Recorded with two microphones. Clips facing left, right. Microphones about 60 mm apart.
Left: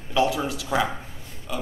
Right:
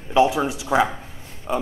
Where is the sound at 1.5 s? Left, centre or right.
Right.